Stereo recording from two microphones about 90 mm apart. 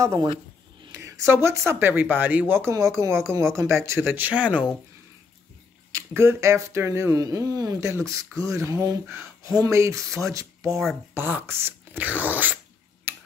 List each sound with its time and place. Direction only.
0.9 s speech: 35° right (ahead or behind)
2.7 s speech: 35° right (ahead or behind); by 4.6 s 15° right (ahead or behind)
6.1 s speech: 30° right (ahead or behind)
7.8 s speech: 30° right (ahead or behind)
11.1 s speech: 25° right (ahead or behind)
13.1 s a sound: 20° right (ahead or behind)